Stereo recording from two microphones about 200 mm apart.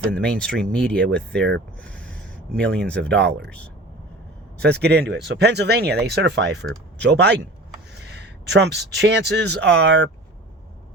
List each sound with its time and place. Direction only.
0.3 s speech: 5° left (ahead or behind)
1.8 s a sound: 5° left (ahead or behind)
2.6 s speech: 5° left (ahead or behind)
4.7 s speech: 55° right (ahead or behind)